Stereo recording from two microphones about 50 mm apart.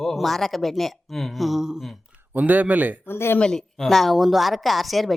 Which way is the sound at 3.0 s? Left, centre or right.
Left.